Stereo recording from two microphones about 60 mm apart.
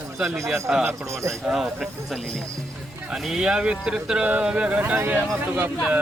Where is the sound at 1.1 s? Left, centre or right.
Right.